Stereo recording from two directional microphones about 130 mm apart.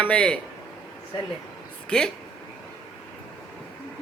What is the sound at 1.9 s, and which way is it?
Speech, 5° left (ahead or behind).